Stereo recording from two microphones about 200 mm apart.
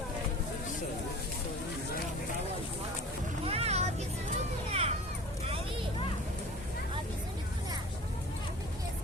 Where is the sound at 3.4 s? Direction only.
30° right (ahead or behind).